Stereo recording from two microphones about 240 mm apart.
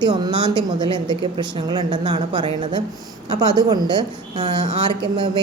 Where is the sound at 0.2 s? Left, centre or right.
Centre.